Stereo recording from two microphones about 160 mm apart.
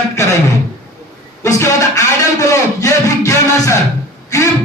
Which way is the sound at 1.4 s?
20° left (ahead or behind).